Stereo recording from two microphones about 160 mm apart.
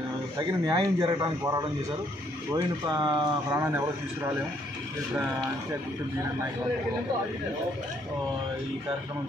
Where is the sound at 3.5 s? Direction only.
15° right (ahead or behind).